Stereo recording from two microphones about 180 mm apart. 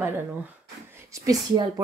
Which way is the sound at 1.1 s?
20° right (ahead or behind).